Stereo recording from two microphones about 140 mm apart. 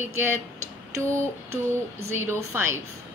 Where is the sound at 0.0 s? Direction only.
15° right (ahead or behind).